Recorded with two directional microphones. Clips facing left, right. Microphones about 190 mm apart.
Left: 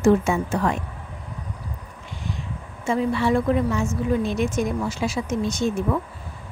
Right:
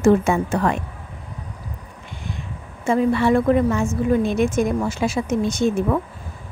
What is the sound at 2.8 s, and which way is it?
Speech, 55° right (ahead or behind).